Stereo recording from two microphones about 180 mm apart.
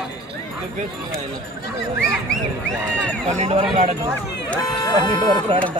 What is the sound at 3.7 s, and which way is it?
Run, 30° right (ahead or behind).